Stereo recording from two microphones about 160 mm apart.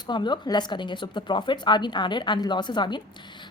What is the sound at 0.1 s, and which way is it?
A woman's voice, 30° left (ahead or behind).